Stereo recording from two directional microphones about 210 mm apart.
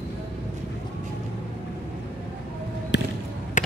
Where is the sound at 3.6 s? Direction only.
35° left (ahead or behind).